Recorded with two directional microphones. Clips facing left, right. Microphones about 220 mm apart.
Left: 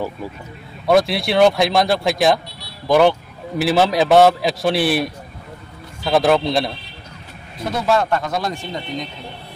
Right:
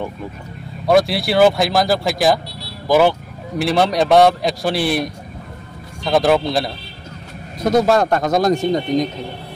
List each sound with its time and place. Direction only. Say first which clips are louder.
0.8 s a man's voice: right 1 dB; centre (ahead or behind)
7.5 s a man's voice: right 5 dB; 40° right (ahead or behind)